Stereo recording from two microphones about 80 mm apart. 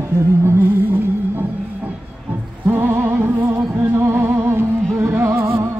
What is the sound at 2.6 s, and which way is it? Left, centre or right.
Music, right.